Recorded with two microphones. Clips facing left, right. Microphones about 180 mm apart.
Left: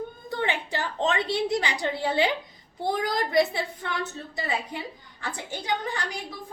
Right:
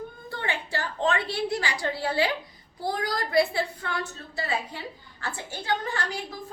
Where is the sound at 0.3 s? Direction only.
20° left (ahead or behind).